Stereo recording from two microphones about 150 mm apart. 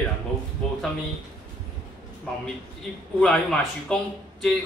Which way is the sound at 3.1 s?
5° left (ahead or behind).